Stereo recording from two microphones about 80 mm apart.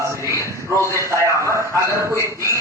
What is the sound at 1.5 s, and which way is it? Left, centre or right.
A man's voice, right.